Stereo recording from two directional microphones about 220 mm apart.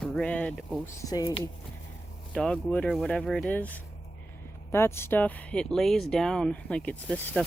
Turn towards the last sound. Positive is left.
turn(degrees=5)  # may be behind; listen again after turning